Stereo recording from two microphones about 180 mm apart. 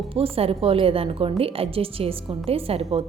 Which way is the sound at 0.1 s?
35° right (ahead or behind).